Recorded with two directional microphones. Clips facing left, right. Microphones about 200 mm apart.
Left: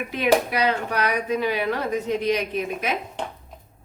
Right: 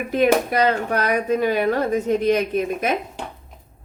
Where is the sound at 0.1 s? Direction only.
45° right (ahead or behind).